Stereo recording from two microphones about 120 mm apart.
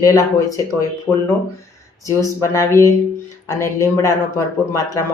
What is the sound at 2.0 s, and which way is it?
Speech, 25° left (ahead or behind).